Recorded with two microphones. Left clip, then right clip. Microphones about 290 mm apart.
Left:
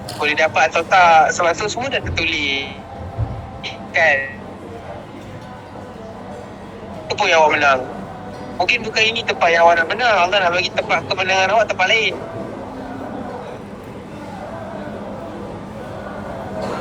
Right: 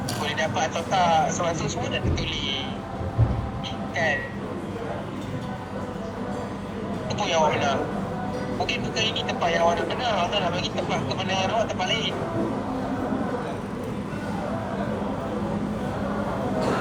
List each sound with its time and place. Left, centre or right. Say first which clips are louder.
0.3 s speech: left 12 dB; left
3.9 s speech: left 10 dB; left
7.1 s speech: left 9 dB; left